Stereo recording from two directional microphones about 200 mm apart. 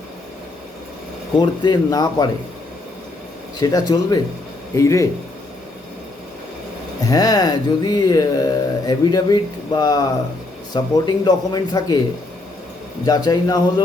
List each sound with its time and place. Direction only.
1.4 s speech: 20° left (ahead or behind)
3.6 s speech: 20° left (ahead or behind)
7.0 s speech: 20° left (ahead or behind)
13.1 s speech: 20° left (ahead or behind)